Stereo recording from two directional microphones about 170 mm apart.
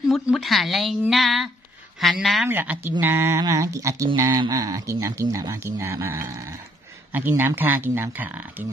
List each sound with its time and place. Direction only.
0.1 s a woman's voice: centre (ahead or behind)
2.4 s speech: 10° right (ahead or behind)